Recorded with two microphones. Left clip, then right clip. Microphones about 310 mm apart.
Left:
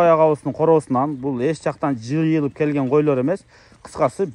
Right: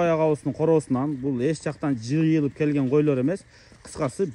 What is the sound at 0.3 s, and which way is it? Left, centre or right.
Speech, left.